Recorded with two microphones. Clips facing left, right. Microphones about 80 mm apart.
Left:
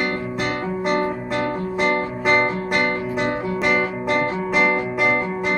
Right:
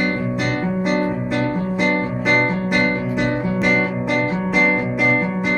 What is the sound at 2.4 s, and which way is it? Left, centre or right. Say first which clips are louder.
Guitar: right 2 dB; right.